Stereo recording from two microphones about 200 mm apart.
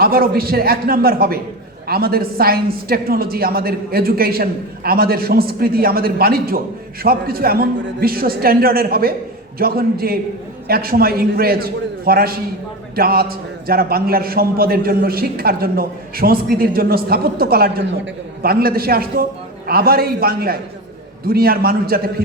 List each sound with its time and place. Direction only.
0.0 s a man's voice: 50° right (ahead or behind)